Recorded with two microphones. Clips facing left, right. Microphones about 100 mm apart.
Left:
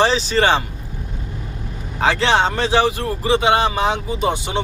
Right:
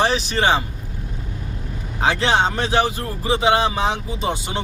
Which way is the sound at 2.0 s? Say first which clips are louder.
Left 2 dB; 90° left.